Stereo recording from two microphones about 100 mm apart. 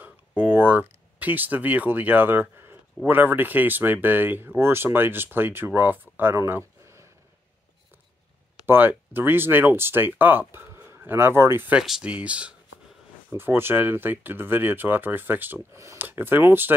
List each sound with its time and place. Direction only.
0.4 s speech: 20° right (ahead or behind)
6.3 s a sound: 25° right (ahead or behind)
8.6 s speech: 20° right (ahead or behind)
11.8 s speech: 5° right (ahead or behind)